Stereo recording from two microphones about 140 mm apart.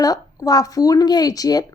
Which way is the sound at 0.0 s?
25° left (ahead or behind).